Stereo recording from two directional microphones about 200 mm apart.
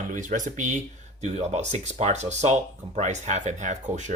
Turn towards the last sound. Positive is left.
turn(degrees=-35)  # may be behind; listen again after turning